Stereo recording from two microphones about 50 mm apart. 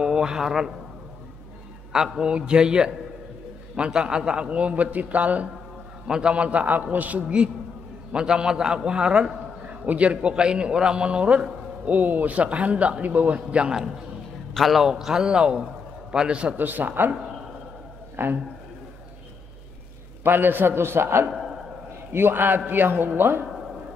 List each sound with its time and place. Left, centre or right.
0.0 s a man's voice: centre
1.9 s a man's voice: centre; by 5.5 s right
6.0 s a man's voice: centre
6.3 s a man's voice: right
11.8 s a man's voice: right
13.5 s a man's voice: right
14.5 s a man's voice: centre
14.8 s a man's voice: centre
16.5 s a man's voice: right
18.1 s a man's voice: right
20.2 s a man's voice: right